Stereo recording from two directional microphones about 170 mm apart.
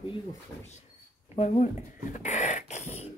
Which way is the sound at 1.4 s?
45° left (ahead or behind).